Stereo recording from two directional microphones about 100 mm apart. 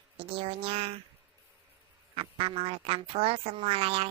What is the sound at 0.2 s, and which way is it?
Speech, 70° right (ahead or behind).